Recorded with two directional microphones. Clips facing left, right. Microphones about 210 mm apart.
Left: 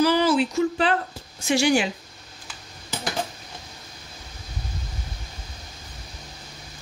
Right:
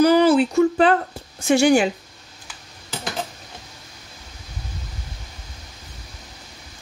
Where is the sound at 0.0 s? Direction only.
55° right (ahead or behind).